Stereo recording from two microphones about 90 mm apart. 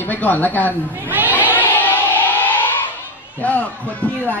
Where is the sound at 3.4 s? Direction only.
15° left (ahead or behind).